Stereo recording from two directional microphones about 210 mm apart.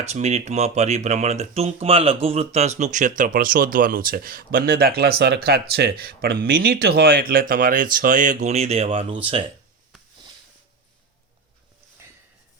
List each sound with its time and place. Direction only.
0.0 s speech: 30° right (ahead or behind)